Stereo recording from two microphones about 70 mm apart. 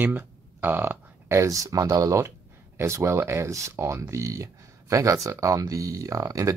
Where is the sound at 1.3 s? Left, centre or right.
Right.